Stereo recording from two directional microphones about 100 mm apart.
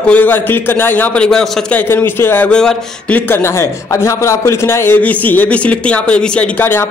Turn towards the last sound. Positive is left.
turn(degrees=20)  # may be behind; listen again after turning